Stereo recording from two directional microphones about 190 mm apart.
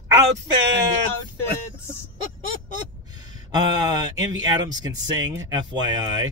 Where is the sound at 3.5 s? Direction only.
20° right (ahead or behind).